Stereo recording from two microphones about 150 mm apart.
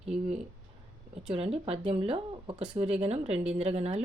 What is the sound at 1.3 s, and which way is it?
Speech, 40° right (ahead or behind).